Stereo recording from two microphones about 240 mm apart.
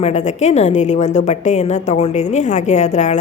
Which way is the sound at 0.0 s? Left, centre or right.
Left.